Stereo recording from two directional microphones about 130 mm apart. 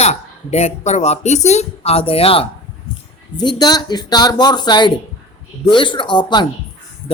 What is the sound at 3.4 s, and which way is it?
Speech, 30° left (ahead or behind).